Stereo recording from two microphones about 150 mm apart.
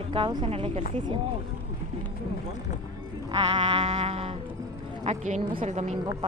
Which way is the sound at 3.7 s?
50° right (ahead or behind).